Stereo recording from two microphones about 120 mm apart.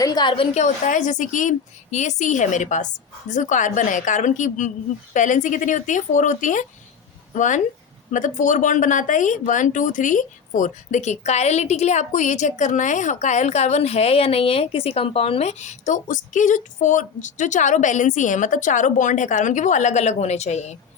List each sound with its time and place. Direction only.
0.0 s a woman's voice: 35° left (ahead or behind)
0.5 s speech: 85° left